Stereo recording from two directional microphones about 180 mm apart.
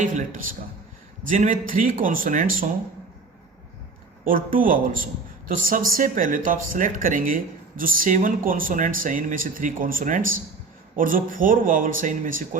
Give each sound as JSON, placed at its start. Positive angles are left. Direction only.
{"t": 0.0, "sound": "a man's voice", "side_deg": -45}
{"t": 4.2, "sound": "speech", "side_deg": -50}